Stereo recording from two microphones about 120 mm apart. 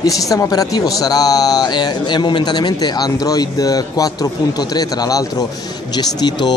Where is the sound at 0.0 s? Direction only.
30° left (ahead or behind).